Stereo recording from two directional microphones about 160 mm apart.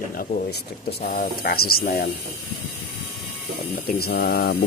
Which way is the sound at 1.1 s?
60° left (ahead or behind).